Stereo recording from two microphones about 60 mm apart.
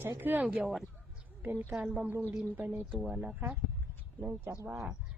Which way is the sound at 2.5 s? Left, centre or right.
Right.